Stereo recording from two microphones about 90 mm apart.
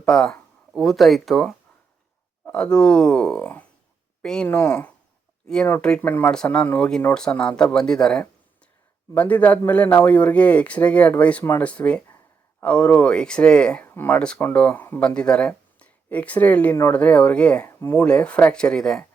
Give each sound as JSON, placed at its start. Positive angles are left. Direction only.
{"t": 0.0, "sound": "speech", "side_deg": 10}
{"t": 2.4, "sound": "speech", "side_deg": 10}
{"t": 6.0, "sound": "speech", "side_deg": 20}
{"t": 6.3, "sound": "speech", "side_deg": 10}
{"t": 13.8, "sound": "speech", "side_deg": 20}
{"t": 17.7, "sound": "a sound", "side_deg": 30}
{"t": 17.9, "sound": "speech", "side_deg": 15}